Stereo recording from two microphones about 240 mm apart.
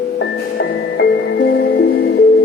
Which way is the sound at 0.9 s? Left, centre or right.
Left.